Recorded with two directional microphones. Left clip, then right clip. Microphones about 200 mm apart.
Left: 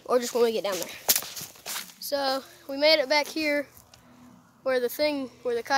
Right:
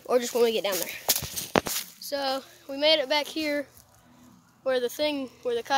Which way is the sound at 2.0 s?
15° left (ahead or behind).